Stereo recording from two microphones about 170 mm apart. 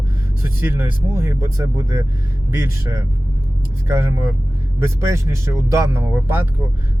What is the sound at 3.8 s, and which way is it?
Speech, 15° right (ahead or behind).